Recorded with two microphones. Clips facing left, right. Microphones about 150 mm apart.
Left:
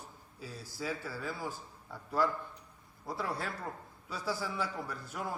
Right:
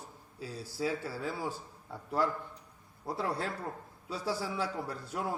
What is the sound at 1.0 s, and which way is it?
Speech, 30° right (ahead or behind).